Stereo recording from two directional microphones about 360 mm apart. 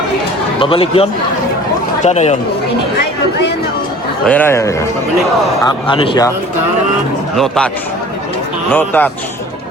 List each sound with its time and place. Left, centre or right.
0.6 s a man's voice: centre
2.0 s a man's voice: centre
4.3 s a man's voice: centre
7.3 s speech: centre
8.7 s speech: centre